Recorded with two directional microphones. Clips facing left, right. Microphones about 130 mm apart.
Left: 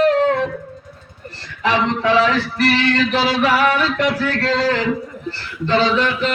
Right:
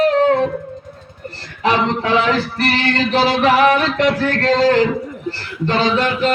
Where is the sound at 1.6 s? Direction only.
45° right (ahead or behind).